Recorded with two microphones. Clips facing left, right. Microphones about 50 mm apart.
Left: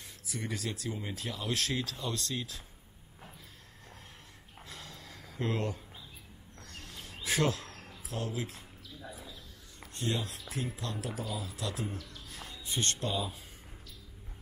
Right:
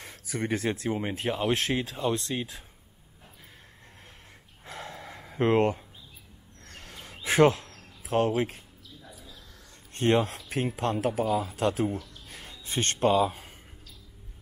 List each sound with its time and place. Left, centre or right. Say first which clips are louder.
0.0 s speech: right 8 dB; right
4.6 s gasp: right 9 dB; right
6.7 s a sound: right 3 dB; right
7.2 s speech: right 10 dB; right
9.9 s speech: right 11 dB; right
11.1 s speech: right 13 dB; right
11.4 s speech: right 11 dB; right
12.3 s a sound: right 1 dB; right